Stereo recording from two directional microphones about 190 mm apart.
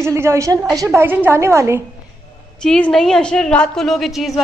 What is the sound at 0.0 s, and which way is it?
A woman's voice, 15° right (ahead or behind).